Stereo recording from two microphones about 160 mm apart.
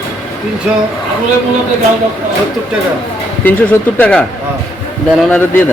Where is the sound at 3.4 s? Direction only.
10° left (ahead or behind).